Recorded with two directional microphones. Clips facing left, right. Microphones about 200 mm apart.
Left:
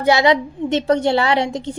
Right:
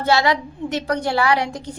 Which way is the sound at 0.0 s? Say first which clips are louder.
Left 4 dB; 20° left (ahead or behind).